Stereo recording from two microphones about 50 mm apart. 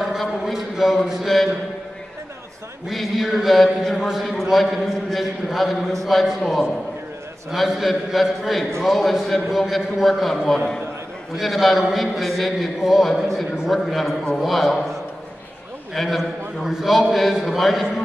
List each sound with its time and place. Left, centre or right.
0.0 s a sound: centre
1.0 s mantra: centre
2.9 s a man's voice: centre
7.5 s a man's voice: centre
15.9 s a man's voice: centre